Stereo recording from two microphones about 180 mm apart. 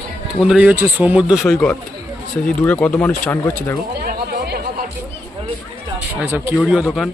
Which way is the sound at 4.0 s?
60° right (ahead or behind).